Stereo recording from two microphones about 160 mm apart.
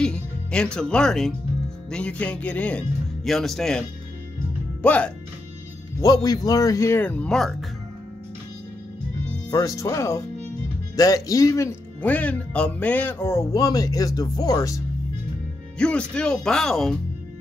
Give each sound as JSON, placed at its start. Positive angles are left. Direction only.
{"t": 0.0, "sound": "speech", "side_deg": 5}
{"t": 4.8, "sound": "speech", "side_deg": 10}
{"t": 5.9, "sound": "speech", "side_deg": 20}
{"t": 9.5, "sound": "speech", "side_deg": 20}
{"t": 15.8, "sound": "speech", "side_deg": 5}